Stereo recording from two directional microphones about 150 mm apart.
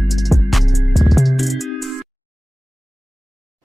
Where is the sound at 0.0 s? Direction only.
Centre (ahead or behind).